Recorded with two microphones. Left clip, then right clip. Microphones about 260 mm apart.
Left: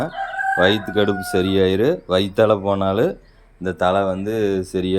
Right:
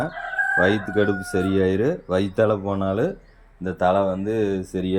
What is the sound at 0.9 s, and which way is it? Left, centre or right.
Speech, centre.